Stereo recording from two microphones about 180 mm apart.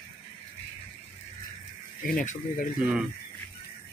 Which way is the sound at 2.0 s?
50° left (ahead or behind).